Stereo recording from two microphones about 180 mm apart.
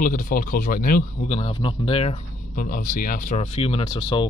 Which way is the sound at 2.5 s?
50° left (ahead or behind).